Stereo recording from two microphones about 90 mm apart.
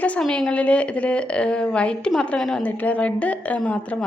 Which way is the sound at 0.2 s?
5° left (ahead or behind).